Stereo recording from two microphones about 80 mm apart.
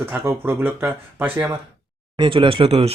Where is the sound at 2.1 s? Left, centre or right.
Right.